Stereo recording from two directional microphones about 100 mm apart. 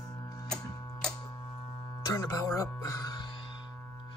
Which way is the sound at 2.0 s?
35° left (ahead or behind).